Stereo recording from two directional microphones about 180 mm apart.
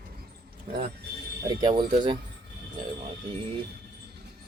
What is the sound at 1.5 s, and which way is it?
Speech, 25° right (ahead or behind).